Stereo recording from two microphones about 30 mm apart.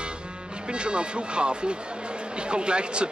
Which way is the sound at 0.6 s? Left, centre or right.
Right.